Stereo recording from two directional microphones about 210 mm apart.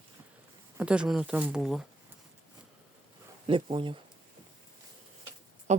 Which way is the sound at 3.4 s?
25° right (ahead or behind).